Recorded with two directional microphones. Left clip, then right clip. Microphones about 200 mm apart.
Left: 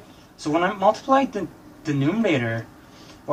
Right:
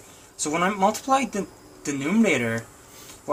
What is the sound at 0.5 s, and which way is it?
Speech, 55° right (ahead or behind).